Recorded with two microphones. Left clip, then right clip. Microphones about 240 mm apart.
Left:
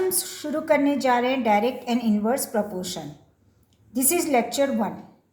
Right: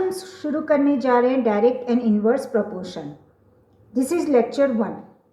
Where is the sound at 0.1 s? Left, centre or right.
Left.